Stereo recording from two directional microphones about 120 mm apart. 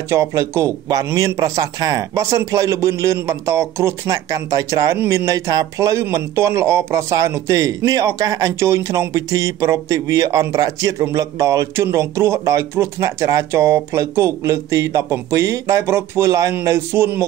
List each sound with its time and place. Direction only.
0.1 s a man's voice: 25° right (ahead or behind)